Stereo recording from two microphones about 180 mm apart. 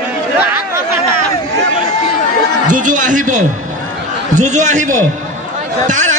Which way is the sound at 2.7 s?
45° right (ahead or behind).